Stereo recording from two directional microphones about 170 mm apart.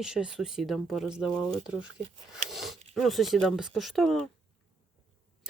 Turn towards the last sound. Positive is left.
turn(degrees=0)  # may be behind; listen again after turning